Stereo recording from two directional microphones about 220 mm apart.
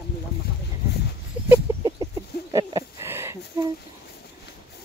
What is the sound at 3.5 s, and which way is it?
Speech, 20° right (ahead or behind).